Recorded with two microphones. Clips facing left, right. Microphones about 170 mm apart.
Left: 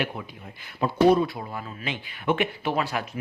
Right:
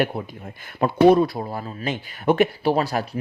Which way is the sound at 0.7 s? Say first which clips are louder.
Right 4 dB; 55° right (ahead or behind).